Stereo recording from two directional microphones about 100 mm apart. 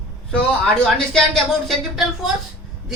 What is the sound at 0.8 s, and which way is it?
A woman's voice, 5° left (ahead or behind).